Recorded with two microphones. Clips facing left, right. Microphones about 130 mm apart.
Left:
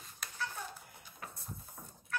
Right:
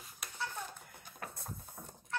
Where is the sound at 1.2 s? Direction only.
55° right (ahead or behind).